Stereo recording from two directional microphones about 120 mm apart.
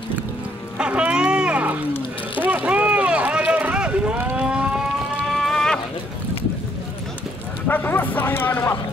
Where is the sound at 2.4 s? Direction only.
10° right (ahead or behind); by 5.8 s 5° left (ahead or behind).